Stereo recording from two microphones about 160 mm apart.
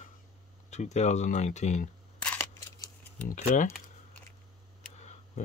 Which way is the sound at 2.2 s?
10° left (ahead or behind).